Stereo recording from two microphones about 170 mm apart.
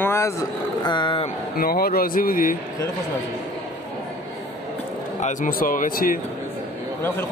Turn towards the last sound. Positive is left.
turn(degrees=55)  # may be behind; listen again after turning